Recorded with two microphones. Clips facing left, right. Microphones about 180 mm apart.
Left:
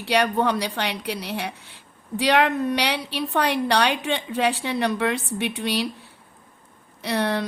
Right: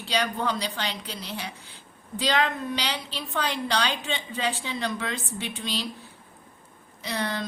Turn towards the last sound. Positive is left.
turn(degrees=65)  # may be behind; listen again after turning